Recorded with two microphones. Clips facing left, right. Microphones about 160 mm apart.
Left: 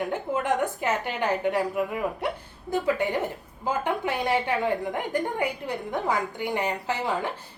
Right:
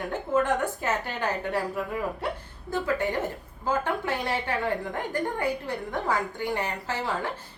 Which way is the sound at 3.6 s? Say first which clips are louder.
Even; 15° left (ahead or behind).